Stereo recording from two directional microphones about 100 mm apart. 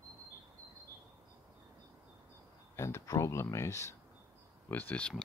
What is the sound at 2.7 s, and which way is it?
Speech, 30° left (ahead or behind).